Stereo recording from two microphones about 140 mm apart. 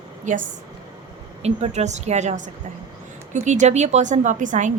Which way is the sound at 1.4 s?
50° right (ahead or behind).